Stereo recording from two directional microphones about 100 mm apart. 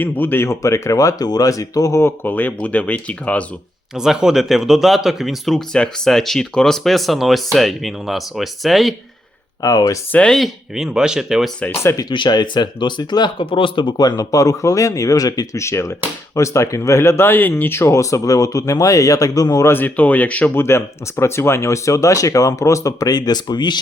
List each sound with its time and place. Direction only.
0.0 s speech: 20° left (ahead or behind)
3.9 s speech: 5° right (ahead or behind)
9.6 s speech: 35° left (ahead or behind)
10.1 s speech: 10° left (ahead or behind)
11.7 s speech: 25° left (ahead or behind)
12.0 s speech: 50° left (ahead or behind)
19.7 s speech: 15° left (ahead or behind); by 23.8 s 45° left (ahead or behind)